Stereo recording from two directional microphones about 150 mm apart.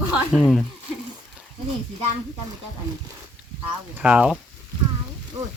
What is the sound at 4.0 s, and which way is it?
Speech, 5° right (ahead or behind).